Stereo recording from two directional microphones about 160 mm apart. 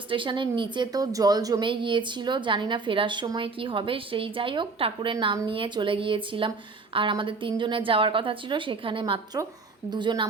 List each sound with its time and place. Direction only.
0.1 s a woman's voice: 30° right (ahead or behind)